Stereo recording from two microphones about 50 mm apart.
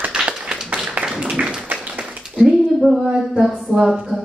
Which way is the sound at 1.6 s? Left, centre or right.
Right.